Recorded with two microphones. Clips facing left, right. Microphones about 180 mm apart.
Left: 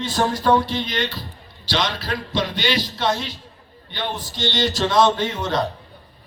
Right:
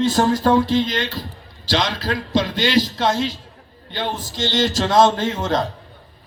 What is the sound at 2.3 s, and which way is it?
Speech, 90° right.